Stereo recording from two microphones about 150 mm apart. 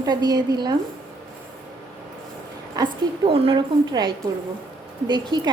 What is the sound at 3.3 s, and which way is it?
A woman's voice, 40° right (ahead or behind).